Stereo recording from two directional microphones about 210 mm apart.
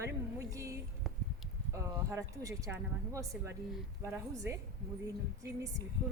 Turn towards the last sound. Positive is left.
turn(degrees=-10)  # may be behind; listen again after turning